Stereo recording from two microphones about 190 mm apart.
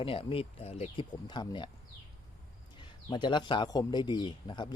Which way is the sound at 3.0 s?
25° left (ahead or behind).